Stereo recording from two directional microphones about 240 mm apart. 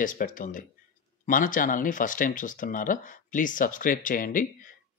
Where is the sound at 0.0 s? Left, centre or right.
Left.